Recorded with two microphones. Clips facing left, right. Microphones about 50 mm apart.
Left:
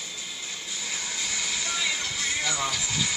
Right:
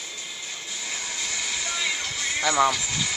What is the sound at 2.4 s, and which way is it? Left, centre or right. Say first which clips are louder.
Speech: right 12 dB; right.